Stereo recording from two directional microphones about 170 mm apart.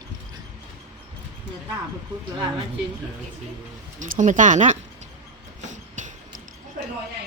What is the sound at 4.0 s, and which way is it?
Speech, 50° right (ahead or behind).